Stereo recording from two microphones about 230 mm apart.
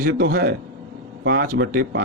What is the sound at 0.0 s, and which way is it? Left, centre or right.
Speech, right.